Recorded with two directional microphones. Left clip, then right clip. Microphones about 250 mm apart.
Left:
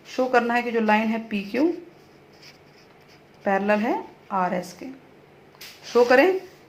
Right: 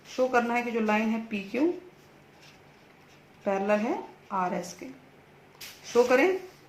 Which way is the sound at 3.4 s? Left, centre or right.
Left.